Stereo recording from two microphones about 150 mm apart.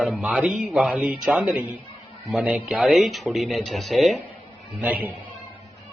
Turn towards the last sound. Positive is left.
turn(degrees=-10)  # may be behind; listen again after turning